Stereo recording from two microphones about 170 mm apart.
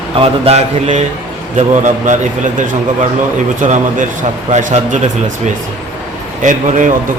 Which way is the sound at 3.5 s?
50° right (ahead or behind).